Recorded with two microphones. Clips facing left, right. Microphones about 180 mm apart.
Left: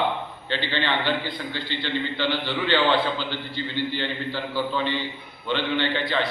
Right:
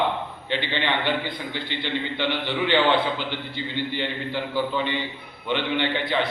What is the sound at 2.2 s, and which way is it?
Speech, 15° right (ahead or behind).